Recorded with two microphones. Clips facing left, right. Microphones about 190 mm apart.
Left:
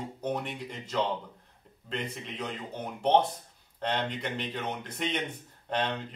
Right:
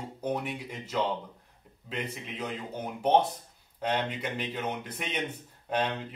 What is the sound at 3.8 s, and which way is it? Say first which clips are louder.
Speech: right 1 dB; 10° right (ahead or behind).